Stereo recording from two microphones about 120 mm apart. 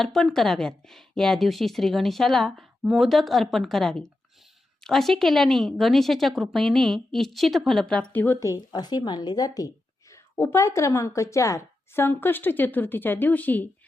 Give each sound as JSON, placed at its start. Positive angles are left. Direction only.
{"t": 0.0, "sound": "a woman's voice", "side_deg": 5}